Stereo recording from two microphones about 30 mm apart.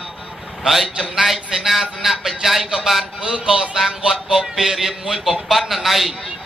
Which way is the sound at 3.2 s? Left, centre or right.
Right.